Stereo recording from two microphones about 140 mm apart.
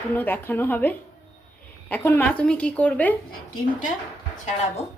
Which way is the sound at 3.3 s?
90° left.